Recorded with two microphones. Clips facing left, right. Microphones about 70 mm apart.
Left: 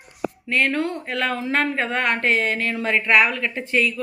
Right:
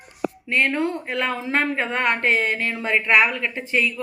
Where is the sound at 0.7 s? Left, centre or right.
Centre.